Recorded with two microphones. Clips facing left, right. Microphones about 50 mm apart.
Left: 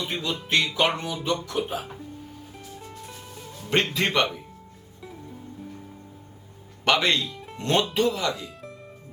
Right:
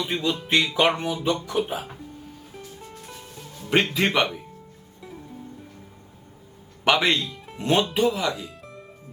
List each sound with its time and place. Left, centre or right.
0.0 s speech: centre
3.7 s speech: centre
6.8 s speech: centre
8.3 s music: centre